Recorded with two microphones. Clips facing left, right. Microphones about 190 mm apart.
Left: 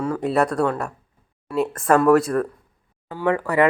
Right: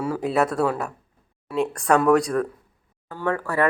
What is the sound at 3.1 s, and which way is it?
Speech, 15° left (ahead or behind).